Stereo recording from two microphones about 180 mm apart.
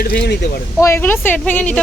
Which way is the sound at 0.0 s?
60° left (ahead or behind).